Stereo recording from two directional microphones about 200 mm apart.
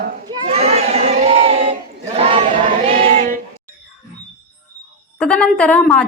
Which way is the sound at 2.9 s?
35° right (ahead or behind).